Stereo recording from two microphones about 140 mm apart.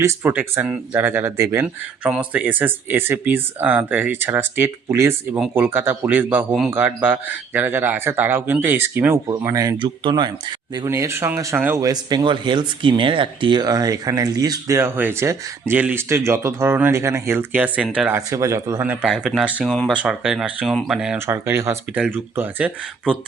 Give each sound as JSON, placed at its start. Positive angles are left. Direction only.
{"t": 0.0, "sound": "speech", "side_deg": -15}
{"t": 1.6, "sound": "speech", "side_deg": -10}
{"t": 9.8, "sound": "speech", "side_deg": -35}
{"t": 10.8, "sound": "speech", "side_deg": -20}
{"t": 11.9, "sound": "speech", "side_deg": -30}
{"t": 18.3, "sound": "speech", "side_deg": -20}
{"t": 19.0, "sound": "speech", "side_deg": -5}
{"t": 19.6, "sound": "speech", "side_deg": 10}
{"t": 19.9, "sound": "speech", "side_deg": -5}
{"t": 21.2, "sound": "speech", "side_deg": -15}